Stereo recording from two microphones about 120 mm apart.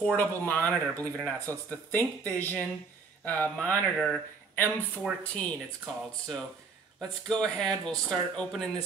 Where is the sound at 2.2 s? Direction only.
15° left (ahead or behind).